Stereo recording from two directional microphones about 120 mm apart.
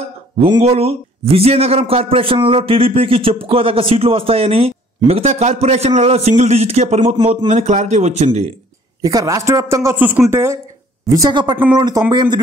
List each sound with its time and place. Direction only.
0.6 s a man's voice: 60° right (ahead or behind)
9.0 s a man's voice: 30° right (ahead or behind)